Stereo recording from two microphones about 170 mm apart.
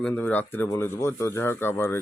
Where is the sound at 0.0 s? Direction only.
10° left (ahead or behind).